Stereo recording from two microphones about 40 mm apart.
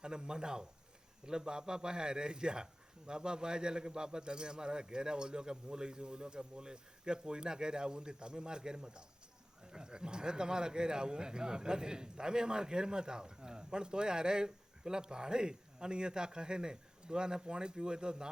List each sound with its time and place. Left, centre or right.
0.0 s speech: centre